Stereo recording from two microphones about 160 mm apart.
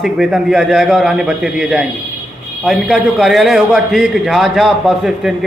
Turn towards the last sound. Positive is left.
turn(degrees=0)  # may be behind; listen again after turning